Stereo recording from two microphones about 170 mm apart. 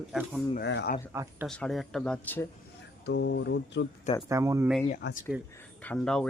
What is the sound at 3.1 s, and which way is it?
Mantra, 90° left.